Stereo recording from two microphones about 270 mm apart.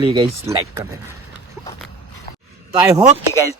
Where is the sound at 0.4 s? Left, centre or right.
Centre.